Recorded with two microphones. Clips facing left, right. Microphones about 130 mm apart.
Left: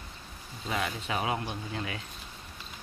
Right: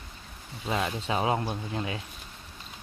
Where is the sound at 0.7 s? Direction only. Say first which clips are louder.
Right 3 dB; 25° right (ahead or behind).